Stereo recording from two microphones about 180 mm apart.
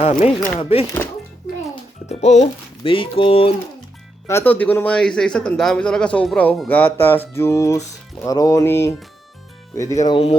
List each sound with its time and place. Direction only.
0.0 s speech: 40° left (ahead or behind)
0.3 s a man's voice: 10° left (ahead or behind)
0.6 s speech: 30° left (ahead or behind)
2.0 s speech: 40° left (ahead or behind)
4.3 s a man's voice: 10° left (ahead or behind)